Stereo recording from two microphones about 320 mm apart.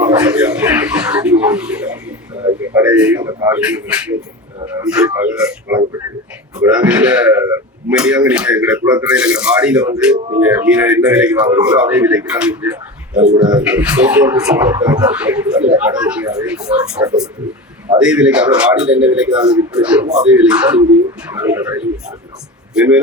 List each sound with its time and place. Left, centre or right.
0.0 s a sound: centre
2.7 s speech: centre
10.2 s speech: centre
10.4 s speech: centre